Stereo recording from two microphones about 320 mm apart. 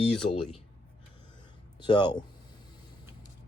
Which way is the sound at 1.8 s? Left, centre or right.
Centre.